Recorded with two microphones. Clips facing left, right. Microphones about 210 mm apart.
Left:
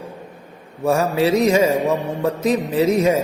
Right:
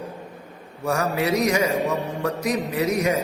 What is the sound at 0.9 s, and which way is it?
A man's voice, 30° left (ahead or behind).